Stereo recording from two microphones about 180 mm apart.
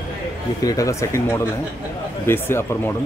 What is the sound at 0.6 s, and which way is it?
Speech, 20° left (ahead or behind).